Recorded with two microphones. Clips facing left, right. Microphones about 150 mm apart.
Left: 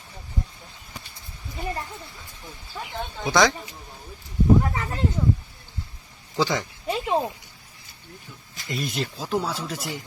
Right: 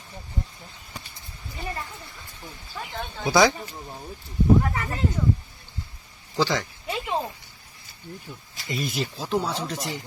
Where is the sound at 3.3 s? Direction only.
10° right (ahead or behind).